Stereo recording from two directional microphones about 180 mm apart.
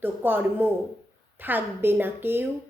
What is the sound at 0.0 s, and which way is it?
A woman's voice, 10° right (ahead or behind).